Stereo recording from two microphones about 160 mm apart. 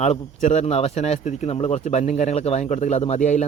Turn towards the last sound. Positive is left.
turn(degrees=45)  # may be behind; listen again after turning